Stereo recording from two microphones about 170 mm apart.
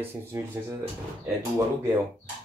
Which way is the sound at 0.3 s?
15° right (ahead or behind).